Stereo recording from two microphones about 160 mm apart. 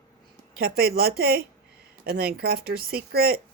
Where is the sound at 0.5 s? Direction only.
70° right (ahead or behind).